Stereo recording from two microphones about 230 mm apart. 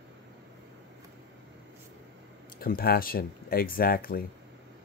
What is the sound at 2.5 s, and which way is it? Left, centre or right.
Speech, left.